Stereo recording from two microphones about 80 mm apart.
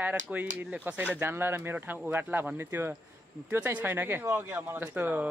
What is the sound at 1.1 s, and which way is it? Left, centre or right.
Speech, right.